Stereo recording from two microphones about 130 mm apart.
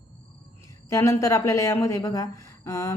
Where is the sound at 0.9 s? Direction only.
25° left (ahead or behind).